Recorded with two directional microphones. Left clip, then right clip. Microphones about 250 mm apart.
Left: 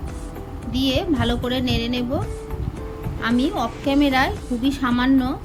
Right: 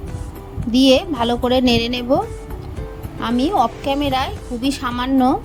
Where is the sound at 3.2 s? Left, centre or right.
Right.